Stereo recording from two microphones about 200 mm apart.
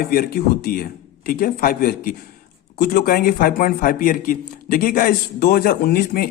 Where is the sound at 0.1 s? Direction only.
45° left (ahead or behind).